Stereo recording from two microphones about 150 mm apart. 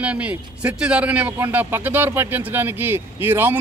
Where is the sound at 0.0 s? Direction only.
10° right (ahead or behind).